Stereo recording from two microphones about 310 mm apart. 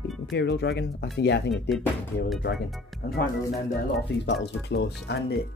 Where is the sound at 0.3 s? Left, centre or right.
Left.